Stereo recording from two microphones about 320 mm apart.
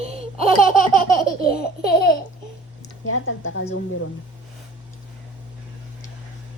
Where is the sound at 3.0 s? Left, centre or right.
Left.